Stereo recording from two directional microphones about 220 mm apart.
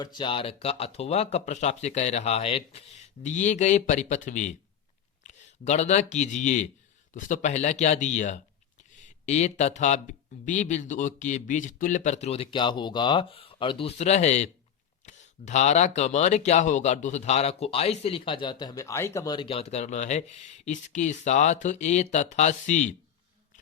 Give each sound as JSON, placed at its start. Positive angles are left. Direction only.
{"t": 0.0, "sound": "speech", "side_deg": 20}